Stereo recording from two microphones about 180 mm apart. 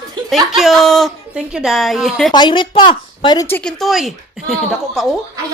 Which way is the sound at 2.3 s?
25° left (ahead or behind).